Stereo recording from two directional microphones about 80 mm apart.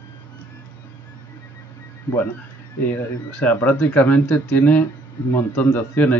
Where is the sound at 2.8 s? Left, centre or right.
Left.